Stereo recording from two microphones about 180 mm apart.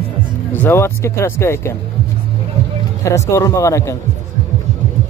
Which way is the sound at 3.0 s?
15° left (ahead or behind).